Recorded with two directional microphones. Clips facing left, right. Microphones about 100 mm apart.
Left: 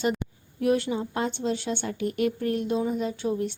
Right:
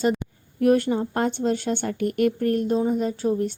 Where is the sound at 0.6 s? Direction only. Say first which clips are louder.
Right 5 dB; 50° right (ahead or behind).